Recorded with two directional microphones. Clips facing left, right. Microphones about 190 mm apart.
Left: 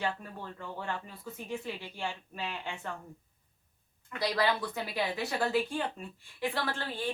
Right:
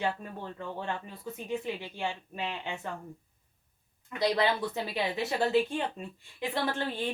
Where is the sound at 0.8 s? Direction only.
20° right (ahead or behind).